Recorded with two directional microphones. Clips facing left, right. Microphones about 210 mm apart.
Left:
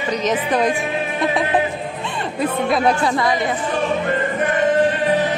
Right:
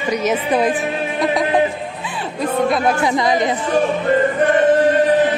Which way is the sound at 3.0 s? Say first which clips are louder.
Right 2 dB; 15° right (ahead or behind).